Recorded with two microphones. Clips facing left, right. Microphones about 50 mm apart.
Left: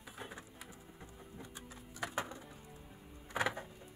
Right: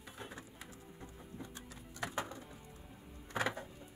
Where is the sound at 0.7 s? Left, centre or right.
Centre.